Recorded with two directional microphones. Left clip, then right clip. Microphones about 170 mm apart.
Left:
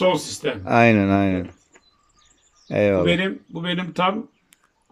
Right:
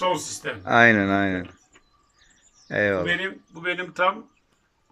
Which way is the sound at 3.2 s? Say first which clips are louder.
Left 1 dB; 60° left (ahead or behind).